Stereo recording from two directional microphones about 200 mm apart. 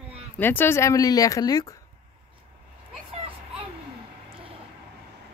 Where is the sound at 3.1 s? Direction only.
25° right (ahead or behind).